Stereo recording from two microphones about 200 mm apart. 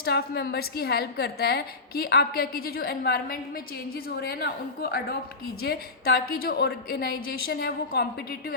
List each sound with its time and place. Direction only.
0.0 s a woman's voice: 55° left (ahead or behind)